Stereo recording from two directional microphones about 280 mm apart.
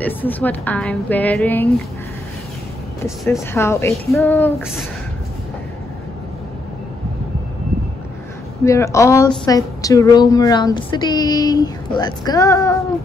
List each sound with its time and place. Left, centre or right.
0.0 s a woman's voice: centre
3.3 s a woman's voice: centre
8.6 s a woman's voice: centre